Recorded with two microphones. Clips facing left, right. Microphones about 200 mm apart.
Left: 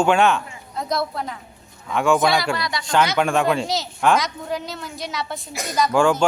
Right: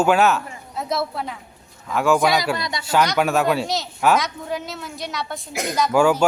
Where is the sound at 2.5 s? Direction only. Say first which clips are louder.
Left 1 dB; 20° right (ahead or behind).